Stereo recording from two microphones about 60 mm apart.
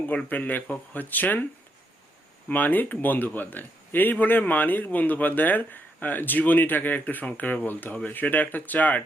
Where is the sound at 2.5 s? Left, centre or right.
Left.